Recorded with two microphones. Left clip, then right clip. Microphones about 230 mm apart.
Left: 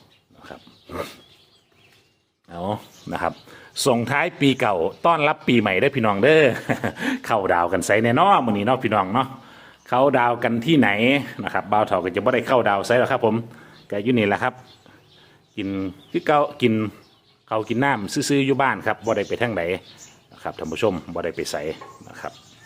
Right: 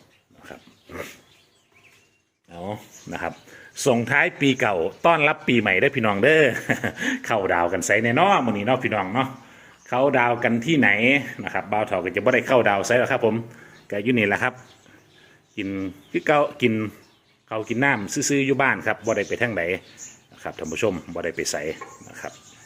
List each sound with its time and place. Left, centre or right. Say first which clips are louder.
0.4 s wild animals: left 2 dB; centre
2.5 s a sound: left 5 dB; left
3.8 s speech: even; centre
15.5 s speech: left 1 dB; centre